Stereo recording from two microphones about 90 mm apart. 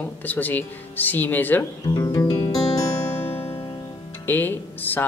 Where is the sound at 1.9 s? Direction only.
45° left (ahead or behind).